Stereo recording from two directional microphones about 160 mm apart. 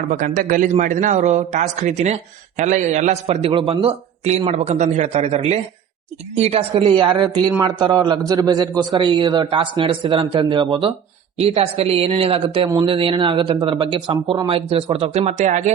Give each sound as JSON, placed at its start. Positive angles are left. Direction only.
{"t": 0.1, "sound": "a man's voice", "side_deg": -55}